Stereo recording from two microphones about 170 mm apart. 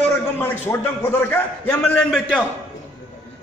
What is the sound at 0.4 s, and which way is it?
A man's voice, 10° left (ahead or behind).